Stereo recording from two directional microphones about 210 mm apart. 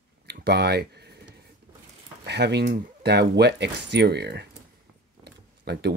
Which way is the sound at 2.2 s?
50° right (ahead or behind).